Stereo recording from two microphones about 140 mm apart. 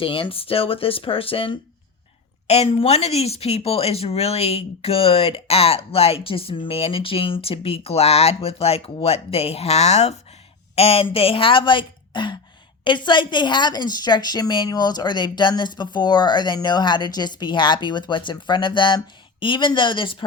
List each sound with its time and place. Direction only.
0.0 s a woman's voice: 40° left (ahead or behind)